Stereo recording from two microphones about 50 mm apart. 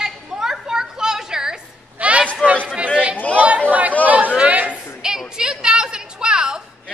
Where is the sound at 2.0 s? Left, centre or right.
Right.